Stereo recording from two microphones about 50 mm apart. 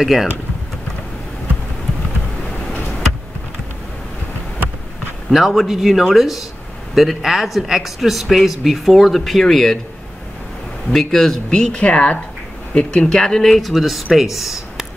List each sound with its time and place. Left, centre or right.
0.0 s speech: centre
5.3 s speech: centre
10.9 s speech: centre
11.7 s speech: left
12.7 s speech: centre